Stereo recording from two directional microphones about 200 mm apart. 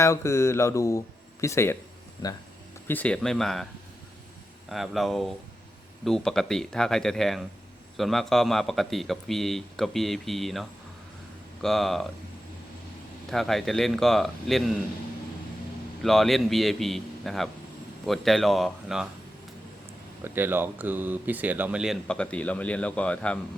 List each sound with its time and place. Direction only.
0.0 s speech: 15° left (ahead or behind)
2.8 s speech: 10° left (ahead or behind)
4.7 s speech: centre (ahead or behind)
13.3 s speech: centre (ahead or behind)
16.0 s speech: centre (ahead or behind)
20.2 s speech: 10° right (ahead or behind); by 23.4 s 5° left (ahead or behind)